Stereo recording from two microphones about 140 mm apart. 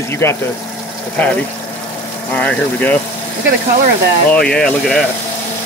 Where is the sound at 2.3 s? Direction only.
10° left (ahead or behind).